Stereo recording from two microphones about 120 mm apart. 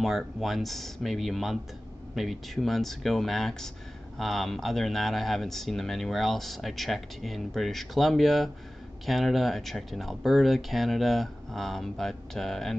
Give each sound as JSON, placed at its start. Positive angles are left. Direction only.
{"t": 0.0, "sound": "speech", "side_deg": 0}